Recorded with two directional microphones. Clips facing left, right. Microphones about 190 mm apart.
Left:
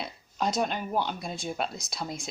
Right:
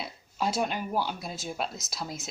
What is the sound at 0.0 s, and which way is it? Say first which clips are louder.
Speech: left 1 dB; 5° right (ahead or behind).